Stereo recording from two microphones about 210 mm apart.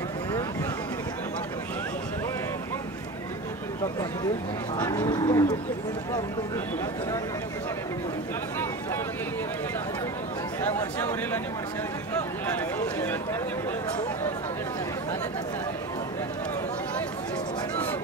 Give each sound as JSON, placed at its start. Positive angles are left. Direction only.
{"t": 4.7, "sound": "speech", "side_deg": 15}
{"t": 10.6, "sound": "speech", "side_deg": 10}